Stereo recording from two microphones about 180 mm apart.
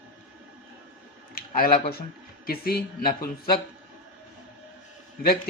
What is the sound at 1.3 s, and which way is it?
Speech, 50° left (ahead or behind).